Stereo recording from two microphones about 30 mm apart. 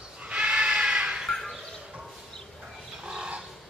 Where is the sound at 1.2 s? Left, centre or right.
Centre.